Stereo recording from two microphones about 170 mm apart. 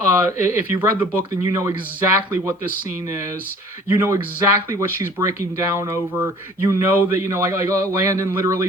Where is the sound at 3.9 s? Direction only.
15° right (ahead or behind).